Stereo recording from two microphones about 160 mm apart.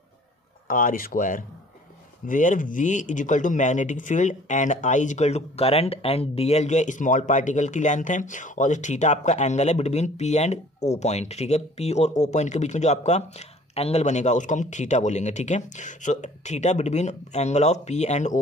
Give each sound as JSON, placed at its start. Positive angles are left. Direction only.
{"t": 0.7, "sound": "speech", "side_deg": 60}